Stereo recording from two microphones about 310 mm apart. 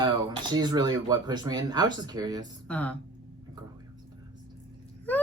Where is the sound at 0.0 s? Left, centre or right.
Centre.